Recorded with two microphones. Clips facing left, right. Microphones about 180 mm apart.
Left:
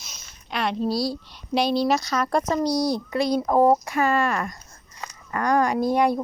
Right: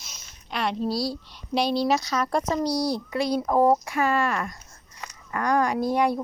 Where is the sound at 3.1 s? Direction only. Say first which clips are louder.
Left 2 dB; 5° right (ahead or behind).